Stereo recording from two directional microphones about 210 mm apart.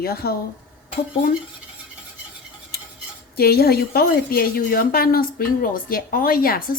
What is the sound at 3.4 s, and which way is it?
A woman's voice, 50° left (ahead or behind).